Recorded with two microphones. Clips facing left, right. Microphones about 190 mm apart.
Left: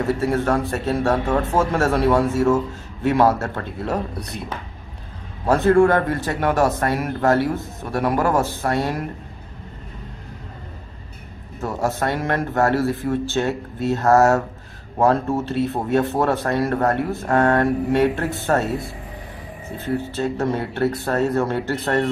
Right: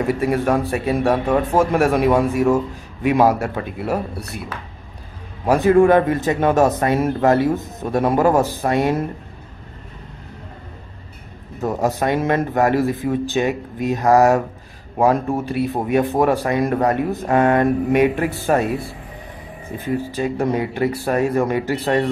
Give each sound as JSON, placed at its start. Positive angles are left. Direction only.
{"t": 0.0, "sound": "a man's voice", "side_deg": -15}
{"t": 11.6, "sound": "a man's voice", "side_deg": -20}
{"t": 19.8, "sound": "a man's voice", "side_deg": -15}